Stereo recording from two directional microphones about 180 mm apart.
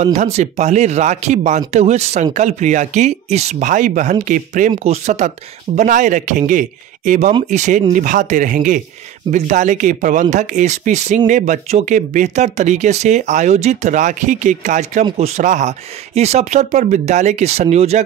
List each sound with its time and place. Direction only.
0.0 s speech: 35° right (ahead or behind)